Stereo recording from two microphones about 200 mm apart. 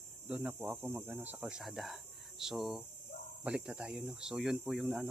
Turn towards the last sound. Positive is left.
turn(degrees=0)  # may be behind; listen again after turning